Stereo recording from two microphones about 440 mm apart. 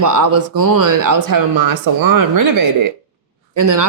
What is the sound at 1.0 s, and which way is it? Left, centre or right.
Speech, right.